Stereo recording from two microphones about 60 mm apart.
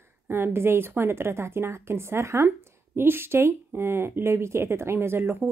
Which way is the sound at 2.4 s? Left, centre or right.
Right.